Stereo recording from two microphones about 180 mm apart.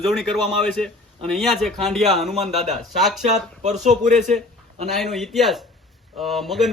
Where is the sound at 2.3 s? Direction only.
35° right (ahead or behind).